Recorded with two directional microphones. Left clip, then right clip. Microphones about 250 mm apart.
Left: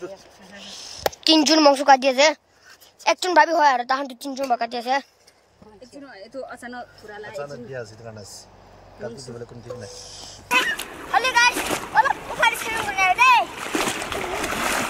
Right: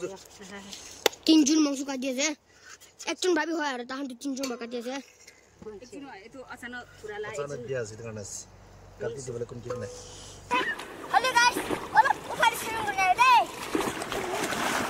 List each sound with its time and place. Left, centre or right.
1.2 s a woman's voice: centre
6.5 s speech: right
7.1 s speech: centre
7.4 s a woman's voice: centre
9.8 s a woman's voice: centre
10.5 s a sound: centre
11.1 s a sound: centre
11.5 s a sound: centre
11.9 s boat: centre
14.2 s splash: centre